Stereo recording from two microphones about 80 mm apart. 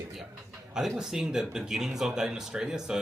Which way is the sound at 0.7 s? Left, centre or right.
Centre.